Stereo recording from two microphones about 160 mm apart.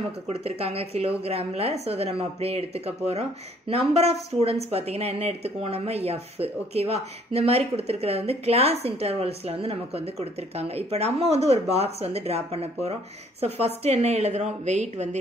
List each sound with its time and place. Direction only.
0.3 s a woman's voice: 40° right (ahead or behind)